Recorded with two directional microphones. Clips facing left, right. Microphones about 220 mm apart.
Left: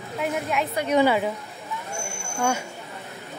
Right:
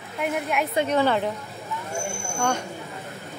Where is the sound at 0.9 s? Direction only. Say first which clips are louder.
Left 5 dB; 10° left (ahead or behind).